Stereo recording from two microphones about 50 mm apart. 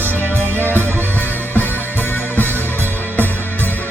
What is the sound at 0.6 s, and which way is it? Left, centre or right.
Music, left.